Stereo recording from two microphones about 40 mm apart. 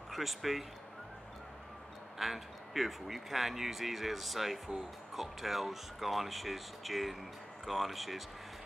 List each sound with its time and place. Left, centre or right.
0.1 s speech: centre
2.1 s speech: centre